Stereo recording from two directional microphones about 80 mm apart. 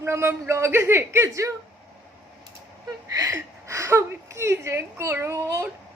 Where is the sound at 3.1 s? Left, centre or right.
Right.